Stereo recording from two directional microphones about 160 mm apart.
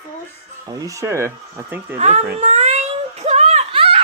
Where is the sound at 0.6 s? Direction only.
20° right (ahead or behind).